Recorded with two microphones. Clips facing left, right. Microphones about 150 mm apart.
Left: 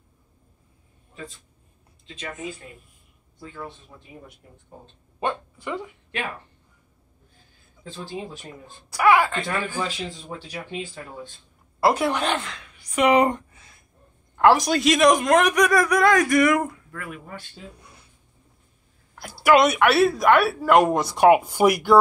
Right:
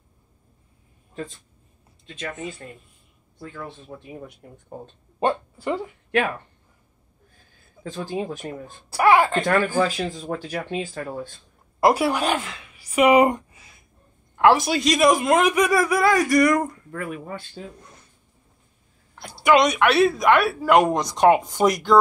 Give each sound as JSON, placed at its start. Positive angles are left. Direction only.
{"t": 3.9, "sound": "speech", "side_deg": -45}
{"t": 5.2, "sound": "speech", "side_deg": -35}
{"t": 7.8, "sound": "speech", "side_deg": -45}
{"t": 8.9, "sound": "speech", "side_deg": -25}
{"t": 9.3, "sound": "speech", "side_deg": -50}
{"t": 11.8, "sound": "a woman's voice", "side_deg": -10}
{"t": 16.9, "sound": "speech", "side_deg": -35}
{"t": 19.1, "sound": "a woman's voice", "side_deg": 5}